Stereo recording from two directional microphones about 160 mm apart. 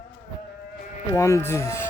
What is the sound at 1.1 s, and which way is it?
Speech, 20° left (ahead or behind).